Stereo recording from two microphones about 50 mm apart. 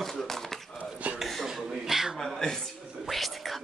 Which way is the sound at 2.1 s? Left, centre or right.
Centre.